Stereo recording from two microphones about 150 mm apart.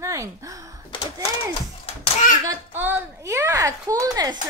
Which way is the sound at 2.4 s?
15° right (ahead or behind).